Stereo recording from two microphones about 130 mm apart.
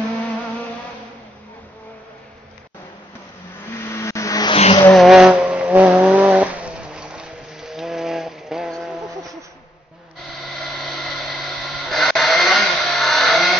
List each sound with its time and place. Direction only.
3.7 s car: 20° left (ahead or behind)
4.6 s vehicle: 55° left (ahead or behind)
4.9 s vehicle: centre (ahead or behind)
10.5 s a sound: centre (ahead or behind)